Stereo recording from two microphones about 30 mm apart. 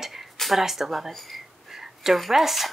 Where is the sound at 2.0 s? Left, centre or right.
Centre.